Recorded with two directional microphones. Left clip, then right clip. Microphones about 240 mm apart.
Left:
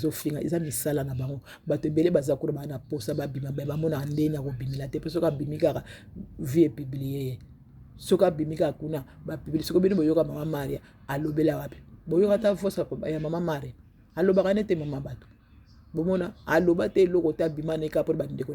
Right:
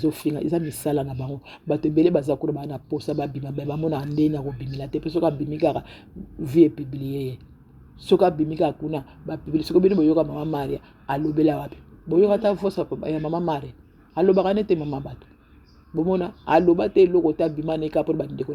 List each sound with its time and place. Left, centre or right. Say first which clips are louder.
0.0 s speech: right 5 dB; left
8.4 s speech: right 4 dB; left